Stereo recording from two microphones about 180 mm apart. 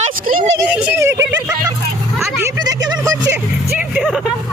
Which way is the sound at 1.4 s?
20° right (ahead or behind).